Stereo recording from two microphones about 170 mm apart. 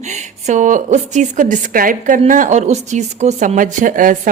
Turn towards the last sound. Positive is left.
turn(degrees=-50)  # may be behind; listen again after turning